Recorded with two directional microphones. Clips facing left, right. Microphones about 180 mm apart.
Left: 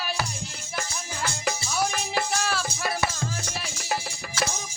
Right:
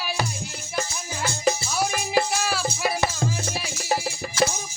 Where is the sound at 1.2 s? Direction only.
25° right (ahead or behind).